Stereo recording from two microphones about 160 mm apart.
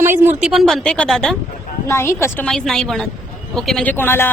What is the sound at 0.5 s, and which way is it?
Speech, centre (ahead or behind).